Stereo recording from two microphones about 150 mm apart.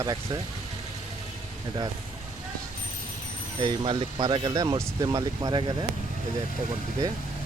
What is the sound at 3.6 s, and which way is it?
Speech, 30° right (ahead or behind).